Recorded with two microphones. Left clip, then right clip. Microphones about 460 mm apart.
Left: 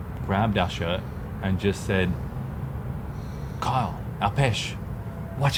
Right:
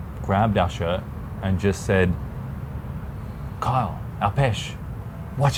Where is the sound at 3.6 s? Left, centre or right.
Centre.